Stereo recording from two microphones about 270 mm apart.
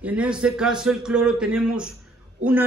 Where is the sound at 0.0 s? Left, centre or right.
Centre.